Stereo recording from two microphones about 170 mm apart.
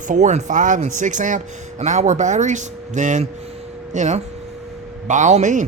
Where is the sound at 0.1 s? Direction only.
45° right (ahead or behind).